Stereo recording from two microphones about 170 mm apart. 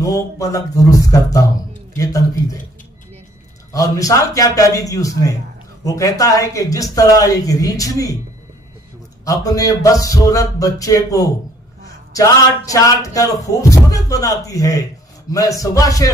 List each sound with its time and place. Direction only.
0.0 s speech: 20° left (ahead or behind)
3.7 s speech: 20° left (ahead or behind)
9.2 s speech: 20° left (ahead or behind)